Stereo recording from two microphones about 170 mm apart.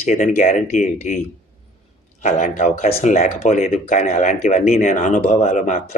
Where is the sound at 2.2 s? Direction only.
45° left (ahead or behind).